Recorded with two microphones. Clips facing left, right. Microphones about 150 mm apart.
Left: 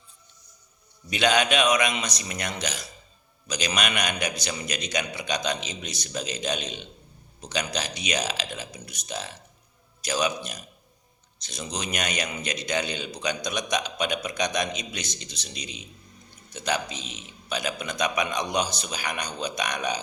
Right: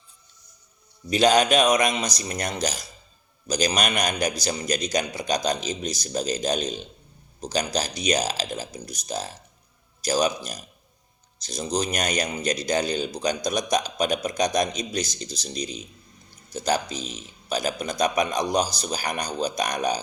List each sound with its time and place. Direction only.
1.1 s speech: 40° right (ahead or behind)